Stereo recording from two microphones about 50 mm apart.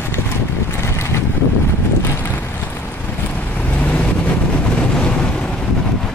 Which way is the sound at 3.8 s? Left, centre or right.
Left.